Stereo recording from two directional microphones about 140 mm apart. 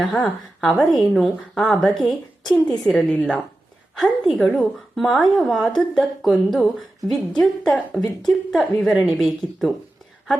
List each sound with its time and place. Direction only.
0.0 s a woman's voice: centre (ahead or behind)